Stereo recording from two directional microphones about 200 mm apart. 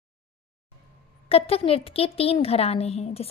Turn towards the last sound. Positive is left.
turn(degrees=30)  # may be behind; listen again after turning